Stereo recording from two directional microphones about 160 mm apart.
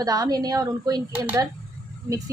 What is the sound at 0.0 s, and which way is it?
A woman's voice, 25° right (ahead or behind).